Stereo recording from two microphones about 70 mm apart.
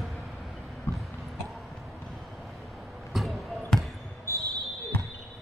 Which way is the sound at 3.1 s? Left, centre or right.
Centre.